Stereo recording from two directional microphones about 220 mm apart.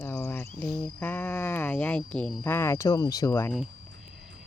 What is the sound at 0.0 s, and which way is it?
Cricket, 10° left (ahead or behind).